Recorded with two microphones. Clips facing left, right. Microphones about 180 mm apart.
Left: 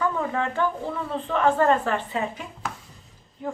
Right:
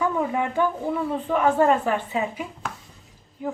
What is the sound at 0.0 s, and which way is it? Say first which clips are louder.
A woman's voice: right 2 dB; 10° right (ahead or behind).